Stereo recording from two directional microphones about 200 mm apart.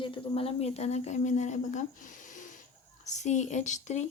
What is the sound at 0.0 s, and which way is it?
Speech, 25° left (ahead or behind).